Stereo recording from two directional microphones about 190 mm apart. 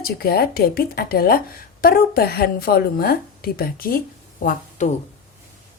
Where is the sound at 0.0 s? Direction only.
55° left (ahead or behind).